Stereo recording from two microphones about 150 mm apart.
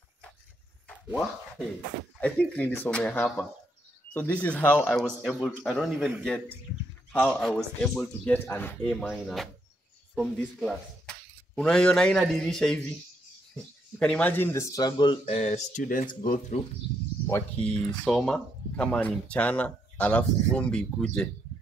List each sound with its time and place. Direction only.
2.1 s a man's voice: 10° left (ahead or behind)
13.9 s speech: 10° left (ahead or behind); by 15.1 s 30° left (ahead or behind)
15.2 s speech: 45° left (ahead or behind)
17.6 s speech: 10° left (ahead or behind)